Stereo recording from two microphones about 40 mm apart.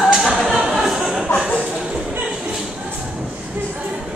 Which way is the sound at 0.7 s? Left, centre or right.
Centre.